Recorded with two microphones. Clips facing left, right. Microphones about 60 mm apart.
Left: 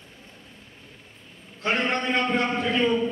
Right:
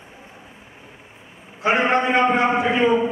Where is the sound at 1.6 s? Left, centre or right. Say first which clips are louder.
Right 7 dB; centre.